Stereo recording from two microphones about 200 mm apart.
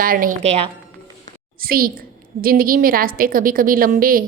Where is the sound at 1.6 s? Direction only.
45° right (ahead or behind).